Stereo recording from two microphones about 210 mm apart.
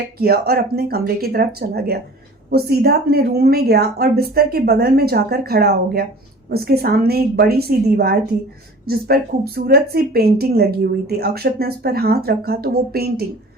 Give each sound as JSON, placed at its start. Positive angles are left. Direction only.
{"t": 0.2, "sound": "speech", "side_deg": -45}